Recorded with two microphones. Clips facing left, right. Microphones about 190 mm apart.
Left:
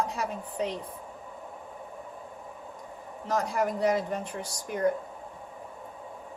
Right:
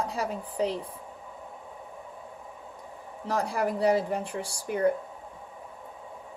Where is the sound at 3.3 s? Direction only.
30° right (ahead or behind).